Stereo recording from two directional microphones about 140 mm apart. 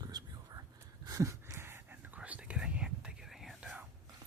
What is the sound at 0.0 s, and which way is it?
Whispering, 30° right (ahead or behind).